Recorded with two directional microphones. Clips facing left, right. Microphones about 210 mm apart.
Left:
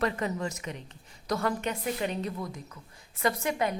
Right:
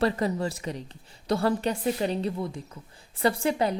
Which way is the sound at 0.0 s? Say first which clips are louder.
Right 4 dB; 35° right (ahead or behind).